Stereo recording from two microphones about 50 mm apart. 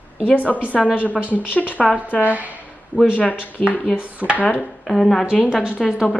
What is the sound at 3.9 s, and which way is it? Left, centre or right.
Speech, right.